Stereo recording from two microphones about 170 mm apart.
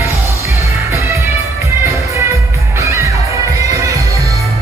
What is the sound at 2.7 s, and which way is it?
Music, 15° right (ahead or behind).